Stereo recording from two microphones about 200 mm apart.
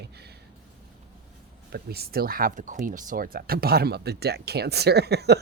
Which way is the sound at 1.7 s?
50° right (ahead or behind).